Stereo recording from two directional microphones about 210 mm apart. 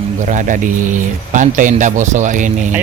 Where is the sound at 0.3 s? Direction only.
40° right (ahead or behind).